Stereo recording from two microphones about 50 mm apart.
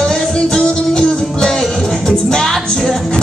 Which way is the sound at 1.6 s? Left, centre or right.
Centre.